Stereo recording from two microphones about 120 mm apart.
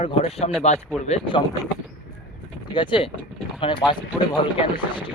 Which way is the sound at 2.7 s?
40° left (ahead or behind).